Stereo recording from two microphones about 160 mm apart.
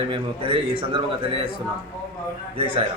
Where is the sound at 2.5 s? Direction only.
35° right (ahead or behind).